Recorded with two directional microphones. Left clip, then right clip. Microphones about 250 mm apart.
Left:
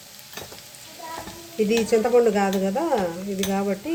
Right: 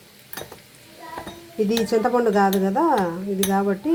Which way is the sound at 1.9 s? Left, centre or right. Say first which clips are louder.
Left 2 dB; centre.